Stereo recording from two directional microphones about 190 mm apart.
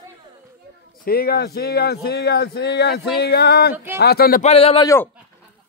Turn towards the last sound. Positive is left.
turn(degrees=15)  # may be behind; listen again after turning